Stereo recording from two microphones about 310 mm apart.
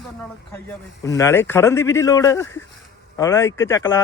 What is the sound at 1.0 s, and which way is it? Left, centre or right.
Speech, centre.